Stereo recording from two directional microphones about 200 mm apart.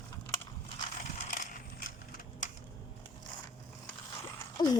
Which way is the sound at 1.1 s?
40° left (ahead or behind).